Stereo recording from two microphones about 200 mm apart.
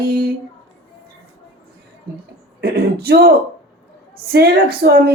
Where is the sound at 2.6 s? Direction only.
50° right (ahead or behind).